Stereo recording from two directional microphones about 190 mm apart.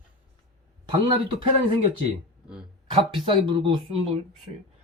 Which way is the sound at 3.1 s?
25° right (ahead or behind).